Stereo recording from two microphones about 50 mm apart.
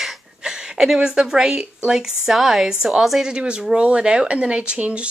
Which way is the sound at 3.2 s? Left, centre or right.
Centre.